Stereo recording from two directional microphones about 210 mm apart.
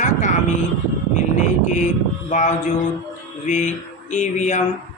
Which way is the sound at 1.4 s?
35° left (ahead or behind).